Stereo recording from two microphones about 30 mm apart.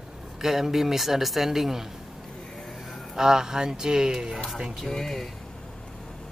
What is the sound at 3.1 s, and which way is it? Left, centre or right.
Speech, right.